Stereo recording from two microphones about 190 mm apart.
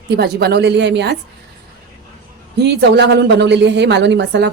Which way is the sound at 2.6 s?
60° right (ahead or behind).